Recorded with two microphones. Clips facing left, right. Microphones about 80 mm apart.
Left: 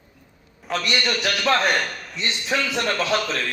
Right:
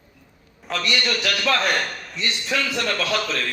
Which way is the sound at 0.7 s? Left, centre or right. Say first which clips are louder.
Left 1 dB; centre.